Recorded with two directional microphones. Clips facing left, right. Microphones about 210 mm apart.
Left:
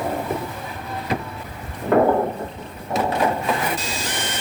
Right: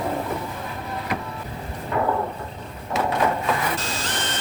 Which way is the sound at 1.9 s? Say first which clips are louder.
Left 9 dB; 60° left (ahead or behind).